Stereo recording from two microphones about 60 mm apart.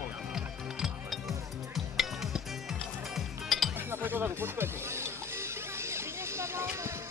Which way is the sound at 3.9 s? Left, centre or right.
Right.